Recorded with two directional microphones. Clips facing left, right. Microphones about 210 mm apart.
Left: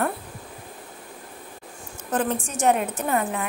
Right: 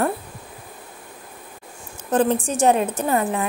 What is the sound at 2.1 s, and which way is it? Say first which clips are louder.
A woman's voice: right 6 dB; 30° right (ahead or behind).